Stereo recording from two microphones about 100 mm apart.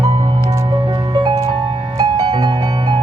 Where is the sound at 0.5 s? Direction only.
30° right (ahead or behind).